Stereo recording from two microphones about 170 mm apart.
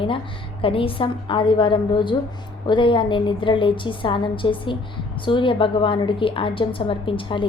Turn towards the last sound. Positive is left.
turn(degrees=30)  # may be behind; listen again after turning